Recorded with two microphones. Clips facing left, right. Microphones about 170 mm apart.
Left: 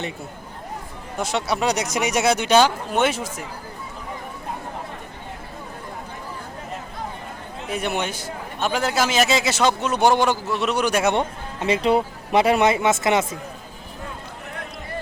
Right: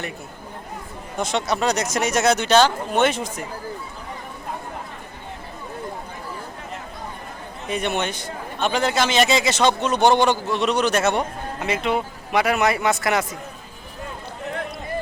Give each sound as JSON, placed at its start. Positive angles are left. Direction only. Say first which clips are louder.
{"t": 1.2, "sound": "a man's voice", "louder": "right 1 dB", "side_deg": 5}
{"t": 7.7, "sound": "a man's voice", "louder": "right 1 dB", "side_deg": 5}
{"t": 11.2, "sound": "speech", "louder": "left 1 dB", "side_deg": 30}